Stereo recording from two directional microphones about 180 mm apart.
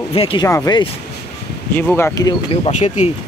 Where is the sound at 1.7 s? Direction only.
10° left (ahead or behind).